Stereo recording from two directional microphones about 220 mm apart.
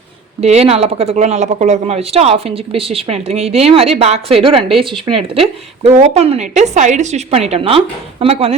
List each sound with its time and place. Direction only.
0.4 s speech: 30° right (ahead or behind)